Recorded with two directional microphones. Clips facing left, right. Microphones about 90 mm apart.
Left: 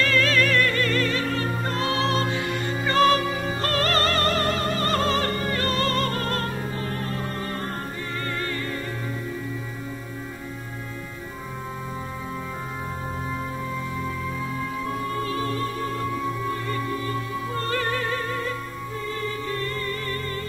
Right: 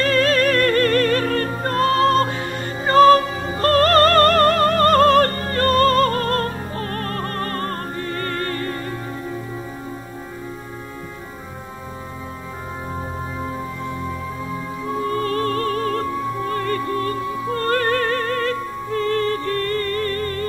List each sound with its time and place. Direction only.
0.0 s music: 40° right (ahead or behind)
15.2 s music: 60° right (ahead or behind)